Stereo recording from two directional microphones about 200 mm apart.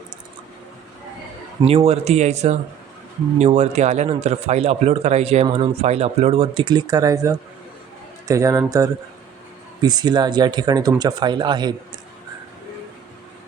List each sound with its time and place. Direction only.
1.6 s a man's voice: 30° right (ahead or behind)